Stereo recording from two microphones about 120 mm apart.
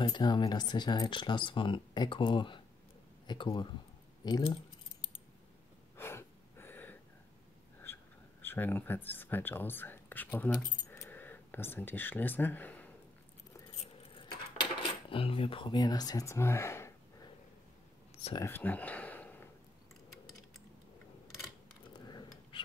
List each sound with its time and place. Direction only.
0.0 s speech: 40° left (ahead or behind)
5.9 s a sound: 20° left (ahead or behind)
7.8 s speech: 20° left (ahead or behind)
14.1 s cutlery: 45° left (ahead or behind); by 16.9 s 20° left (ahead or behind)
18.4 s a sound: 15° left (ahead or behind)
22.0 s dog: 35° left (ahead or behind)